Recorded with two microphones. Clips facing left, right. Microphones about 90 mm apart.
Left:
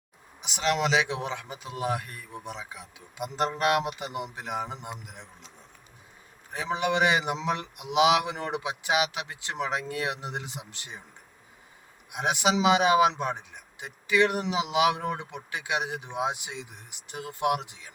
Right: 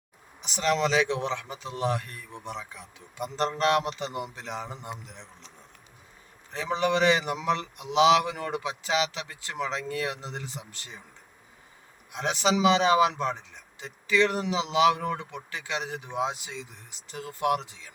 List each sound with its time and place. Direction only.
0.4 s a man's voice: 5° left (ahead or behind)
6.5 s a man's voice: 10° left (ahead or behind)
12.1 s a man's voice: 15° left (ahead or behind)